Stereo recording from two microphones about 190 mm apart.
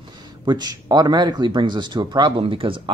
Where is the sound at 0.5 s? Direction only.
20° right (ahead or behind).